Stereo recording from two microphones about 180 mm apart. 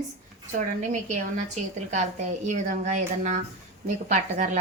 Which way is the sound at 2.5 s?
40° right (ahead or behind).